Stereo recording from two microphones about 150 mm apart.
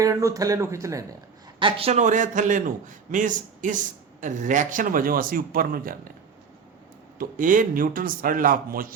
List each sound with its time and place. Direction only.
0.0 s speech: 20° right (ahead or behind)
1.5 s a man's voice: 35° right (ahead or behind); by 6.0 s 70° right (ahead or behind)
7.2 s speech: 65° right (ahead or behind)